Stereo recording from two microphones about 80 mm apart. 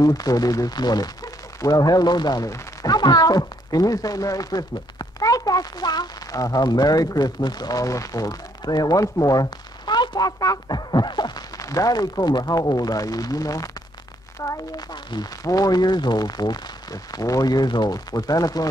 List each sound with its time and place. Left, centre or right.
0.0 s speech: left
14.9 s speech: left